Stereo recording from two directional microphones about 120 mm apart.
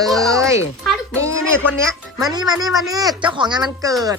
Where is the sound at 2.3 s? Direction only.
35° right (ahead or behind).